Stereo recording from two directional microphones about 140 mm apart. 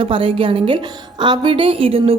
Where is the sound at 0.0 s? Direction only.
40° right (ahead or behind).